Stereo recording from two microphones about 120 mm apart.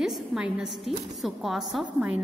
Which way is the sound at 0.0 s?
5° right (ahead or behind).